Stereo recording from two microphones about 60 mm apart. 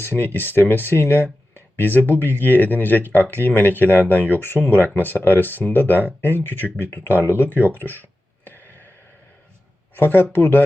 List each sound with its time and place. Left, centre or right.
0.0 s speech: left
8.4 s a sound: left
9.9 s speech: left